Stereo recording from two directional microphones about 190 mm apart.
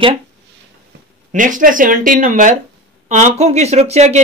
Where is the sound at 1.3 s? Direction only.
45° right (ahead or behind).